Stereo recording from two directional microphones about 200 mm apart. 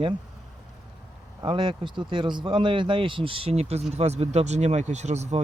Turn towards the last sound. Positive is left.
turn(degrees=-35)  # may be behind; listen again after turning